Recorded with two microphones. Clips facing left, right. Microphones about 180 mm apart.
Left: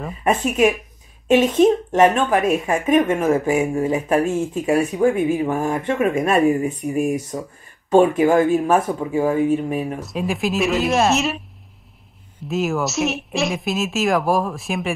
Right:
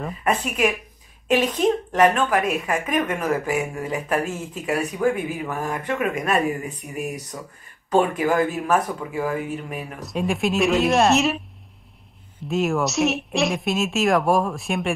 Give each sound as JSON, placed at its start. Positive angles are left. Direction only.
{"t": 0.2, "sound": "speech", "side_deg": 25}
{"t": 9.9, "sound": "speech", "side_deg": 0}
{"t": 12.4, "sound": "speech", "side_deg": 0}